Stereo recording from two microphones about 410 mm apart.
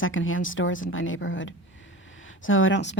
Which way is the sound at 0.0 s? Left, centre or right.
Left.